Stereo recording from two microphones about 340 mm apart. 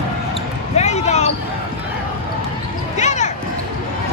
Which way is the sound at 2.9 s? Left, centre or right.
Centre.